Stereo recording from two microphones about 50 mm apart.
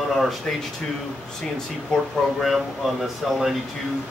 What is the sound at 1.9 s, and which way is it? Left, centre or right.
Speech, centre.